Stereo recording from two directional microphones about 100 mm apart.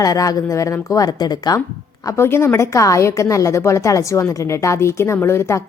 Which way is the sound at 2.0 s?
25° left (ahead or behind).